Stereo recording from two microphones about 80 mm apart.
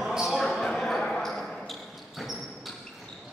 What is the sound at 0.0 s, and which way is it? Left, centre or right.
Basketball bounce, centre.